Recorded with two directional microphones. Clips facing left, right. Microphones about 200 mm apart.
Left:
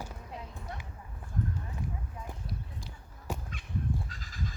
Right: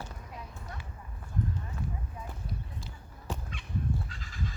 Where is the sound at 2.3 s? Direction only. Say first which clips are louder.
Even; 15° left (ahead or behind).